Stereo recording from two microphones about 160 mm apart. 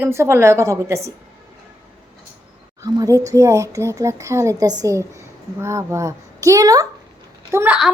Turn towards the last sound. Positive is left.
turn(degrees=-10)  # may be behind; listen again after turning